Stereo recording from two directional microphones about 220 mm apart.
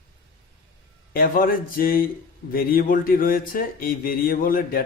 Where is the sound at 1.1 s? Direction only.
40° left (ahead or behind).